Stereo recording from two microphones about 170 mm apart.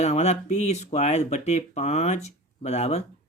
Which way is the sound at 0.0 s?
40° left (ahead or behind).